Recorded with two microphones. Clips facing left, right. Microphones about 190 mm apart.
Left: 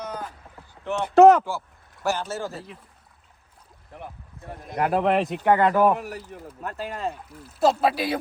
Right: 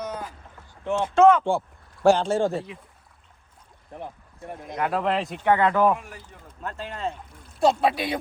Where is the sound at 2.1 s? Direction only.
30° right (ahead or behind).